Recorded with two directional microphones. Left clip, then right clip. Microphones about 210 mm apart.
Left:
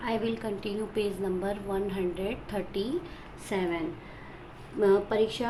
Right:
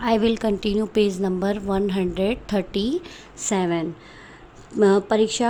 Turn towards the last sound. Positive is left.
turn(degrees=-50)  # may be behind; listen again after turning